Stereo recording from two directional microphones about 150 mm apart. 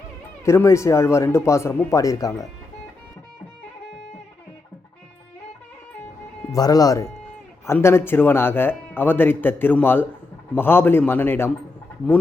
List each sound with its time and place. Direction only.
0.4 s speech: 20° left (ahead or behind)
6.5 s speech: 25° left (ahead or behind)